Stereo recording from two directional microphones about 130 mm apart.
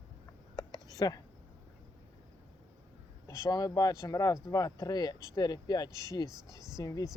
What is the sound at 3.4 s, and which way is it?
Speech, 30° left (ahead or behind).